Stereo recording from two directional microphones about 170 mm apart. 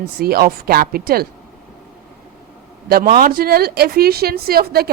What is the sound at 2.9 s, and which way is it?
A woman's voice, 60° right (ahead or behind).